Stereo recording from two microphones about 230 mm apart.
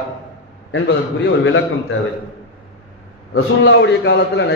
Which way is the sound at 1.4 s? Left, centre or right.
Left.